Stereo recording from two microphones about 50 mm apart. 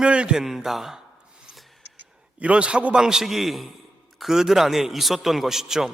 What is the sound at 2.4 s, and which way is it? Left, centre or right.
A man's voice, right.